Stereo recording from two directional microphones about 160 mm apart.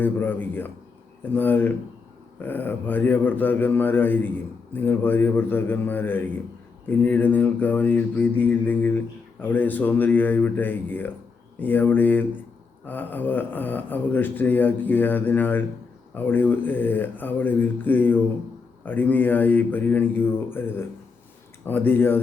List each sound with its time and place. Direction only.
0.0 s mantra: 10° left (ahead or behind)